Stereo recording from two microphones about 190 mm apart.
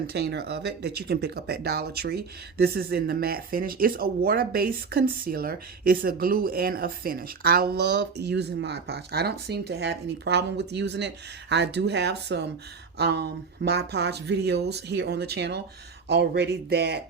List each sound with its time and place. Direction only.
0.1 s speech: 60° right (ahead or behind)